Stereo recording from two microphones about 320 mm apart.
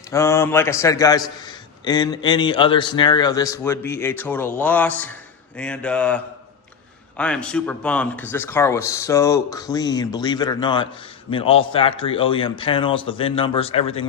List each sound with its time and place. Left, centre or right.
0.1 s a man's voice: centre